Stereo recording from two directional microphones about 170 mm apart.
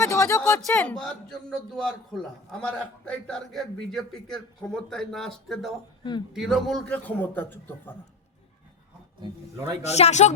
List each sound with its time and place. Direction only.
0.0 s a man's voice: 15° left (ahead or behind)
6.0 s speech: 25° left (ahead or behind)
6.3 s a man's voice: centre (ahead or behind)
9.8 s speech: 40° left (ahead or behind)